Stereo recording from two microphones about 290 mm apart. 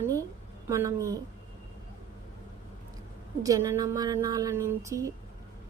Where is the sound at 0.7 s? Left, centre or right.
Centre.